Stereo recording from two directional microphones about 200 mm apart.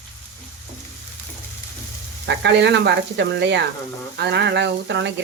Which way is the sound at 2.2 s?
60° right (ahead or behind).